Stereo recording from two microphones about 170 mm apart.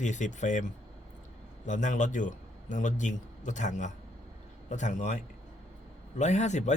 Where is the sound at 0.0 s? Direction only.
45° left (ahead or behind).